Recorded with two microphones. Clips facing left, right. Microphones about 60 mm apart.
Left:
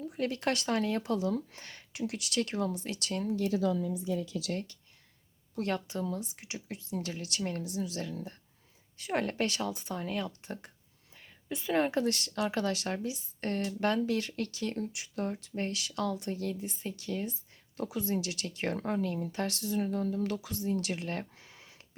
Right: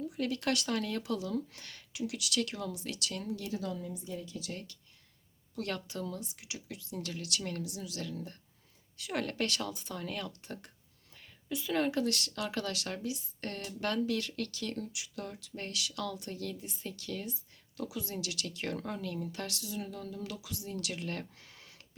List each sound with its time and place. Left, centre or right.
0.0 s speech: left
4.2 s speech: left
5.5 s speech: left
17.7 s speech: left
19.5 s speech: left
20.7 s speech: left